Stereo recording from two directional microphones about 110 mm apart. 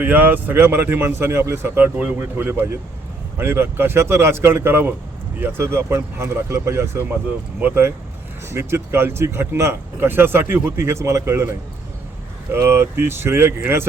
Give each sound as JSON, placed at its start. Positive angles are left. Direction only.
{"t": 0.0, "sound": "speech", "side_deg": -15}